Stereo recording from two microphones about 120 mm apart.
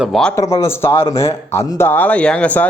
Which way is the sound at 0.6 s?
20° left (ahead or behind).